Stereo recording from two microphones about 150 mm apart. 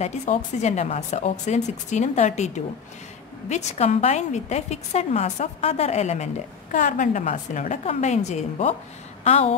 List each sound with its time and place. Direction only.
0.0 s a woman's voice: 50° left (ahead or behind)